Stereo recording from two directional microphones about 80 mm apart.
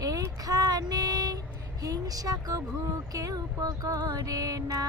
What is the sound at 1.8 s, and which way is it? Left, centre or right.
Speech, right.